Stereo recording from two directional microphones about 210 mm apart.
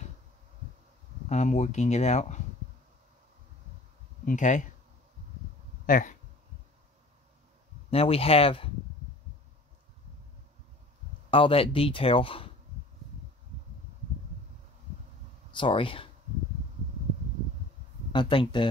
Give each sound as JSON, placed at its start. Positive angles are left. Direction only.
{"t": 1.3, "sound": "speech", "side_deg": 35}
{"t": 4.3, "sound": "speech", "side_deg": 35}
{"t": 5.9, "sound": "speech", "side_deg": 40}
{"t": 7.9, "sound": "speech", "side_deg": 30}
{"t": 11.2, "sound": "speech", "side_deg": 25}
{"t": 15.5, "sound": "speech", "side_deg": 25}
{"t": 18.1, "sound": "speech", "side_deg": 25}